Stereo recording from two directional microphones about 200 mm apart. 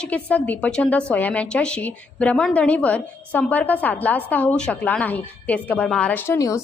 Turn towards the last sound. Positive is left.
turn(degrees=15)  # may be behind; listen again after turning